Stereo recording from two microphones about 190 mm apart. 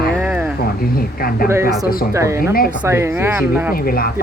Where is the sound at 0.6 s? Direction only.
55° left (ahead or behind).